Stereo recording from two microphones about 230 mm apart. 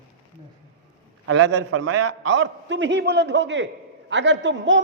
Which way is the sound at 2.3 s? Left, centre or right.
Right.